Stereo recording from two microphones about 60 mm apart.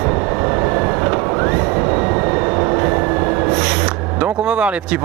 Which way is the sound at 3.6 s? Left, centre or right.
Centre.